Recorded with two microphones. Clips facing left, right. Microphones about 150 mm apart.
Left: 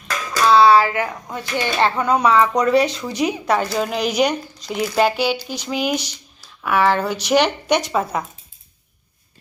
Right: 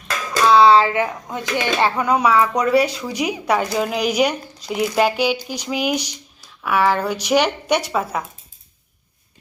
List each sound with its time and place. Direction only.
0.4 s speech: 20° right (ahead or behind)